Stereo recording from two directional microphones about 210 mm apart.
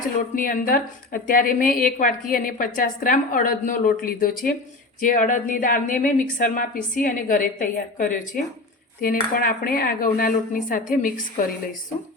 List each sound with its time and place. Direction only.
0.3 s a woman's voice: 40° left (ahead or behind)
9.0 s dishes: 40° left (ahead or behind)